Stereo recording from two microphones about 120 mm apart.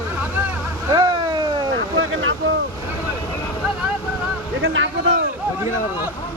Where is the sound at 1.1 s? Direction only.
35° right (ahead or behind).